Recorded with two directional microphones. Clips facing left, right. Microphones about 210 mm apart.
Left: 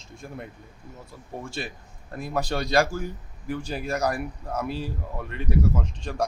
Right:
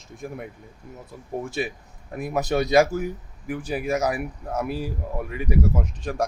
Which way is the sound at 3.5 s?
5° right (ahead or behind).